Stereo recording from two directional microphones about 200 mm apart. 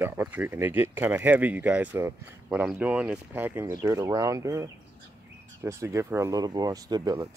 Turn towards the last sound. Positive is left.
turn(degrees=-20)  # may be behind; listen again after turning